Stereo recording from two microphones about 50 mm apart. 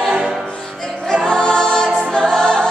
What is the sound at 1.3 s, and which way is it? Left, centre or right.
Choir, centre.